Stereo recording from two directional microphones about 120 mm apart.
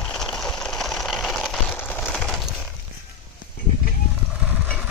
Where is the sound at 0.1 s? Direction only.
5° left (ahead or behind).